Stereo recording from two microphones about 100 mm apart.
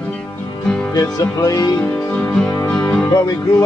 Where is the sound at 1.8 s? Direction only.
15° left (ahead or behind).